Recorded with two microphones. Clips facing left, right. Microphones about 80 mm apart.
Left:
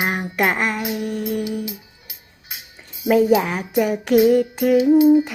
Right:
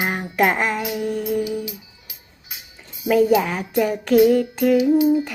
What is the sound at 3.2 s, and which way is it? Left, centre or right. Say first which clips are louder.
Female singing: left 1 dB; centre.